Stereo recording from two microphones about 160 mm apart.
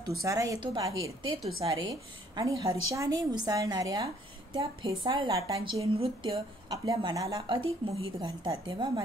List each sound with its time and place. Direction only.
0.2 s a woman's voice: 20° right (ahead or behind)
5.8 s a woman's voice: 35° right (ahead or behind)